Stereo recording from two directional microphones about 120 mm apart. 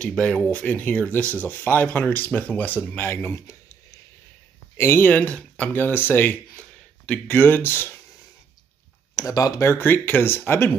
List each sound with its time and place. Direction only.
0.0 s speech: 10° left (ahead or behind); by 3.7 s 25° left (ahead or behind)
4.7 s speech: 20° left (ahead or behind)
9.1 s speech: 30° left (ahead or behind)